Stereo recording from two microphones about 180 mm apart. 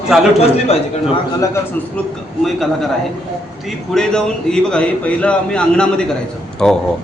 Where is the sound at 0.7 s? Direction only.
35° left (ahead or behind).